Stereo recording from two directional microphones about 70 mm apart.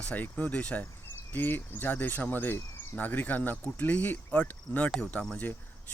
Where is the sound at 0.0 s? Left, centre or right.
Left.